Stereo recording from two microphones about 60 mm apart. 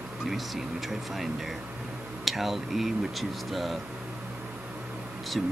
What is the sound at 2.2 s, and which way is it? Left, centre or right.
Speech, centre.